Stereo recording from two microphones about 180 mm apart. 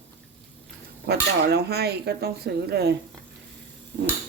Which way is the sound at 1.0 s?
65° right (ahead or behind).